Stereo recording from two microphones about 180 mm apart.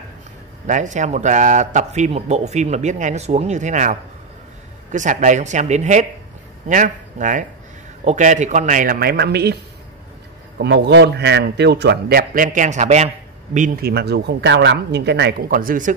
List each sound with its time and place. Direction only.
0.7 s a man's voice: 45° right (ahead or behind); by 9.6 s 65° right (ahead or behind)
10.6 s a man's voice: 70° right (ahead or behind); by 15.9 s 50° right (ahead or behind)